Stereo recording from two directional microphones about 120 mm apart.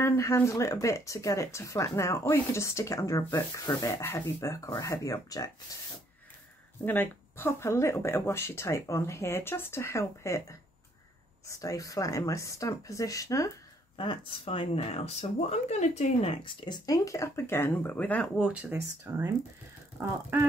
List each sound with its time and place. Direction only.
0.0 s speech: 25° left (ahead or behind)
6.8 s speech: 15° left (ahead or behind)
11.4 s speech: 25° left (ahead or behind)
13.9 s speech: 50° left (ahead or behind)
16.6 s speech: 35° left (ahead or behind); by 18.3 s 15° left (ahead or behind)
18.4 s speech: 10° right (ahead or behind)